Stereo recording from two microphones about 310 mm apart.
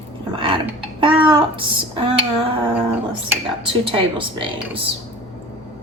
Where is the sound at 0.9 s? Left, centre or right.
Centre.